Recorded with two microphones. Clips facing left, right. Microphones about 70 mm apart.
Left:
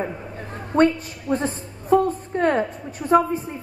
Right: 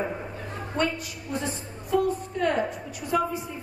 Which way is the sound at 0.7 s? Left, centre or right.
Left.